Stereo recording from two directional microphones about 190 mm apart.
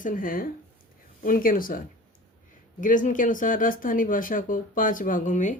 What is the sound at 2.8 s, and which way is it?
Speech, 45° left (ahead or behind).